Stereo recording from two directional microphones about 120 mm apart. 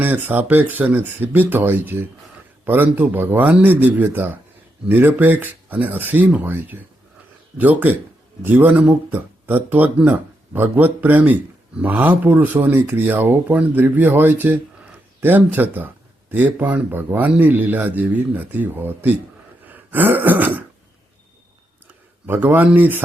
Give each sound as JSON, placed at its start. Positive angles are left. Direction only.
{"t": 0.0, "sound": "speech", "side_deg": -15}
{"t": 19.6, "sound": "throat clearing", "side_deg": -15}
{"t": 22.3, "sound": "speech", "side_deg": -15}